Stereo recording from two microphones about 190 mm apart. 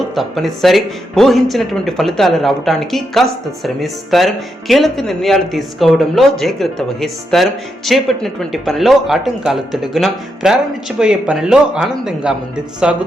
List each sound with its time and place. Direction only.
0.1 s speech: centre (ahead or behind)